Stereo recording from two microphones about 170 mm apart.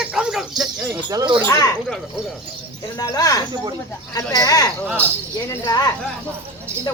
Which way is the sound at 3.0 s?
20° left (ahead or behind).